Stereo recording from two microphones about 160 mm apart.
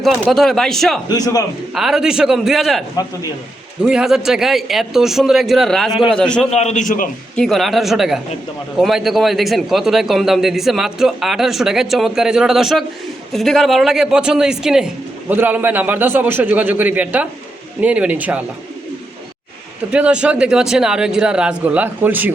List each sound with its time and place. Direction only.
0.0 s a man's voice: centre (ahead or behind)
1.0 s a man's voice: 25° left (ahead or behind)
1.7 s a man's voice: centre (ahead or behind)
3.8 s a man's voice: 5° right (ahead or behind)
6.5 s a man's voice: 45° left (ahead or behind)
7.3 s a man's voice: centre (ahead or behind)
19.9 s a man's voice: 5° right (ahead or behind)